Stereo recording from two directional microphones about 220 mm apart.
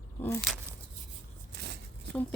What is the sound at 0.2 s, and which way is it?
Speech, 10° left (ahead or behind).